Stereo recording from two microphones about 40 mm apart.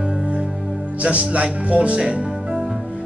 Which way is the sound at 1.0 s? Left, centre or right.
Right.